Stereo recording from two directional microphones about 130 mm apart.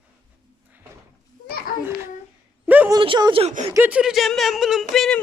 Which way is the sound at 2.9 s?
35° right (ahead or behind).